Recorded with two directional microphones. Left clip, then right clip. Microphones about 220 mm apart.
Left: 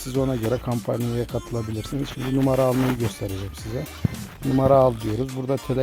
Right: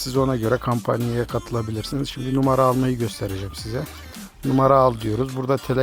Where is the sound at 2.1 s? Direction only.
Centre (ahead or behind).